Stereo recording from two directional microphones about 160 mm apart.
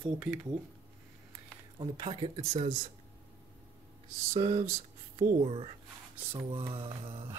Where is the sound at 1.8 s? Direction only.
30° right (ahead or behind).